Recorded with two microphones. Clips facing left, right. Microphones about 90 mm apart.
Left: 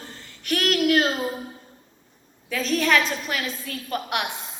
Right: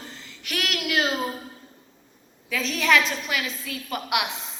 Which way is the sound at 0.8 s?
40° left (ahead or behind).